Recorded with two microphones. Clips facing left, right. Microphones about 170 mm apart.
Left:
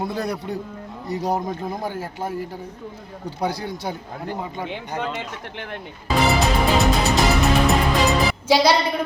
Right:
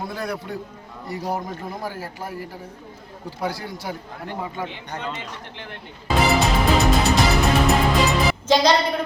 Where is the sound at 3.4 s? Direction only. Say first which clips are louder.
Left 3 dB; 20° left (ahead or behind).